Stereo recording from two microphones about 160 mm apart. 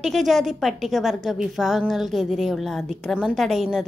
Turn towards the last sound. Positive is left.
turn(degrees=0)  # may be behind; listen again after turning